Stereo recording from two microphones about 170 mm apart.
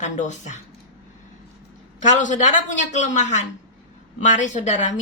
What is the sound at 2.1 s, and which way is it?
A woman's voice, 45° left (ahead or behind).